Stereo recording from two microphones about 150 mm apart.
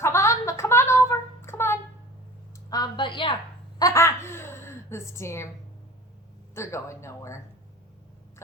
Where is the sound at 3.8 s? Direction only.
20° left (ahead or behind).